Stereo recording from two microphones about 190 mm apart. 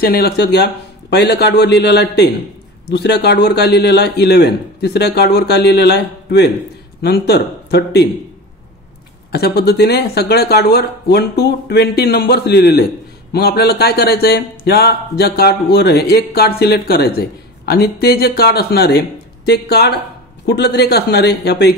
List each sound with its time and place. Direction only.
0.0 s speech: 55° left (ahead or behind)
9.3 s speech: 55° left (ahead or behind)